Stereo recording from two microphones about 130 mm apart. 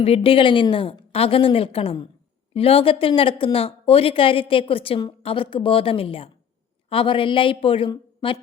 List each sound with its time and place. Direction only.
0.0 s a woman's voice: 50° left (ahead or behind)